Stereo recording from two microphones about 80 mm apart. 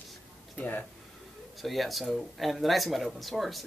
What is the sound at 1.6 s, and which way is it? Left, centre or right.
Speech, centre.